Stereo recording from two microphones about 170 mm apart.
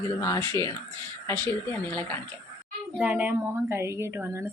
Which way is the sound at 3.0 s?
10° right (ahead or behind).